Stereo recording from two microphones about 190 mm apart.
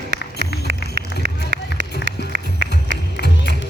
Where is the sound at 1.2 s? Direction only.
60° right (ahead or behind).